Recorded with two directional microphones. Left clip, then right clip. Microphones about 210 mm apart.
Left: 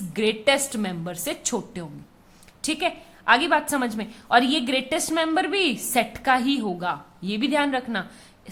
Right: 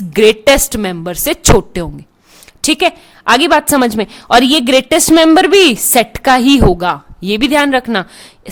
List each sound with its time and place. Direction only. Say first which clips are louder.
0.1 s a woman's voice: right 13 dB; 50° right (ahead or behind)